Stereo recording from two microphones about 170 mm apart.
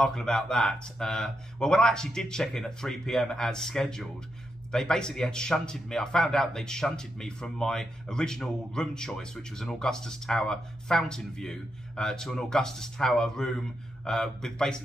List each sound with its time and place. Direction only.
0.0 s a man's voice: 5° left (ahead or behind)